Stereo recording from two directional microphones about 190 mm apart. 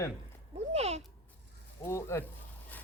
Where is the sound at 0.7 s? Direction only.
35° right (ahead or behind).